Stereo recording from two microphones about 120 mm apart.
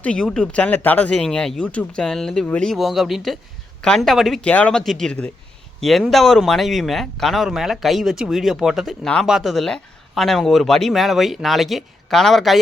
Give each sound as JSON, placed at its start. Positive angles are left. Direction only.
{"t": 0.0, "sound": "speech", "side_deg": 5}